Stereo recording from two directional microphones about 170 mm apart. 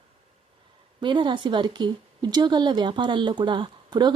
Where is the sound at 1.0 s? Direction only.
25° right (ahead or behind).